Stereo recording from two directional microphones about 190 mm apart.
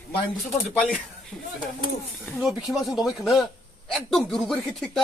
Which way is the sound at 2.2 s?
Centre (ahead or behind).